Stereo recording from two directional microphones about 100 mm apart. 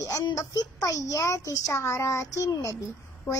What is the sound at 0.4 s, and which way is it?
A child's voice, 35° left (ahead or behind).